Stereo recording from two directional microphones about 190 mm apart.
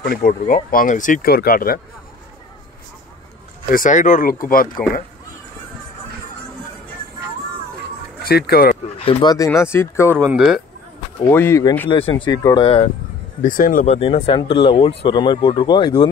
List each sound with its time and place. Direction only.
0.0 s speech: 50° left (ahead or behind)
3.7 s speech: 45° left (ahead or behind)
8.2 s speech: 55° left (ahead or behind)
9.0 s speech: 20° left (ahead or behind)
10.1 s speech: 10° right (ahead or behind)
11.2 s speech: 10° left (ahead or behind)
11.9 s speech: 25° left (ahead or behind)
13.4 s speech: 45° left (ahead or behind)
13.9 s speech: 30° left (ahead or behind)